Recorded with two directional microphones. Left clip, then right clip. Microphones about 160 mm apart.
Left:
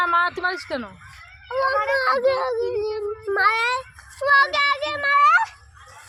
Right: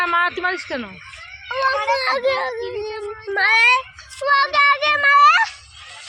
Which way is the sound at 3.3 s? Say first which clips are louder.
Right 6 dB; 80° left.